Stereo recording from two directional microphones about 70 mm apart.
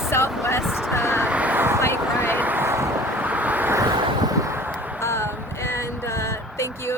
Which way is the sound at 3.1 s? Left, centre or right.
Right.